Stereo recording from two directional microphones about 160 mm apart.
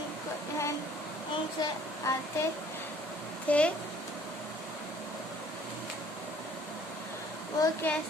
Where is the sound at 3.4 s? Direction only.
10° left (ahead or behind).